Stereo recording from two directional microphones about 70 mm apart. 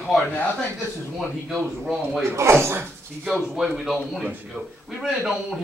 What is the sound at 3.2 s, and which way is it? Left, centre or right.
A man's voice, centre.